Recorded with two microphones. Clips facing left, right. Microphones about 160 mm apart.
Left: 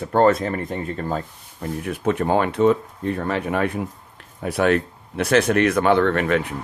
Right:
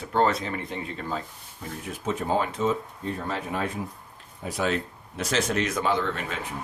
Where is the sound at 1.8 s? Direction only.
65° left (ahead or behind).